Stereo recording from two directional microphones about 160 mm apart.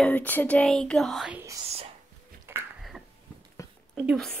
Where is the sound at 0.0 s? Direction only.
10° left (ahead or behind).